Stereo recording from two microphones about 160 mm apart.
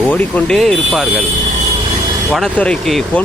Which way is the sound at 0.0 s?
10° left (ahead or behind).